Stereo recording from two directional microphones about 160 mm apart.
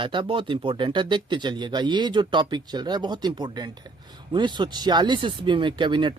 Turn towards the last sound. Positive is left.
turn(degrees=-30)  # may be behind; listen again after turning